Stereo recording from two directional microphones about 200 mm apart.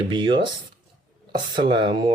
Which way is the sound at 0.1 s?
25° right (ahead or behind).